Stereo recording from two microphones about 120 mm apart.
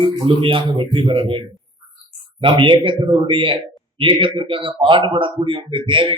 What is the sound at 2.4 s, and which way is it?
Speech, 40° right (ahead or behind).